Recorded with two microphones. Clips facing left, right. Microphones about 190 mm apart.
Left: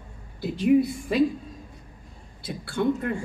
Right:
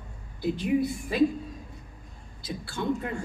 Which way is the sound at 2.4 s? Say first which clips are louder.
Left 5 dB; 60° left (ahead or behind).